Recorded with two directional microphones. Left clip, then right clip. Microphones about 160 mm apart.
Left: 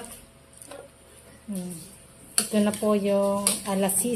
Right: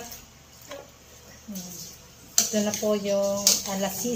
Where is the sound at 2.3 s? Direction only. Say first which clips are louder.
Right 1 dB; 65° left (ahead or behind).